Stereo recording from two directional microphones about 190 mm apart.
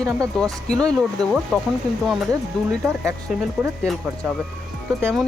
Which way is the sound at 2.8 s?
15° right (ahead or behind).